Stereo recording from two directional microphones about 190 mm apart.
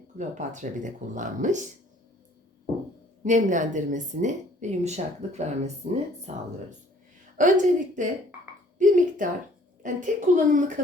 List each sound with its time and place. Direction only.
0.2 s speech: 40° right (ahead or behind)
3.2 s speech: 40° right (ahead or behind)
7.3 s a woman's voice: 40° right (ahead or behind)